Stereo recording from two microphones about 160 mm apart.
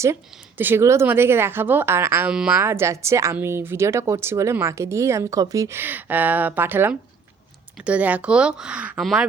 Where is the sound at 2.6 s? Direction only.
15° right (ahead or behind).